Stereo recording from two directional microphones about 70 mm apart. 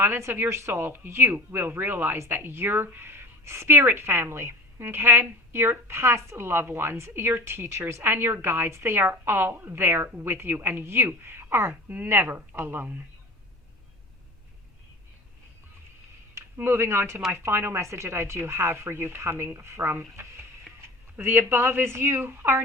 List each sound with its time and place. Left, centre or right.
0.2 s speech: right
11.7 s speech: right
16.6 s speech: right